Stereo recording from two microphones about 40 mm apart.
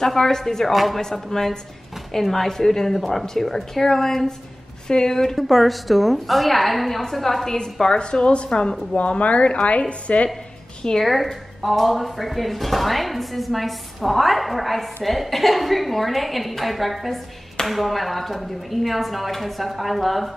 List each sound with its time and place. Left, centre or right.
0.0 s a woman's voice: centre
5.5 s speech: centre
7.8 s a woman's voice: centre
8.9 s a woman's voice: left
11.0 s speech: centre